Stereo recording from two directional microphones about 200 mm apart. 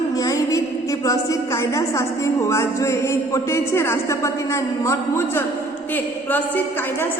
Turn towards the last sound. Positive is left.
turn(degrees=15)  # may be behind; listen again after turning